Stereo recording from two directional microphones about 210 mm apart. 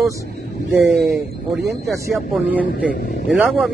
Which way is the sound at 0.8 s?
Centre (ahead or behind).